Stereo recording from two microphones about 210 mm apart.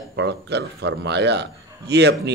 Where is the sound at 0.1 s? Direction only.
55° right (ahead or behind).